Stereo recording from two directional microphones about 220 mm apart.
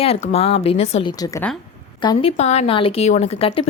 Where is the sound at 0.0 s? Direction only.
25° left (ahead or behind).